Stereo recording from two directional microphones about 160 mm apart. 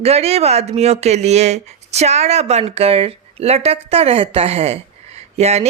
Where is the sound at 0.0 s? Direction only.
40° right (ahead or behind).